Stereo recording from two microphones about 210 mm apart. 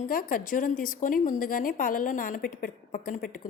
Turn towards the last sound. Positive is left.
turn(degrees=40)  # may be behind; listen again after turning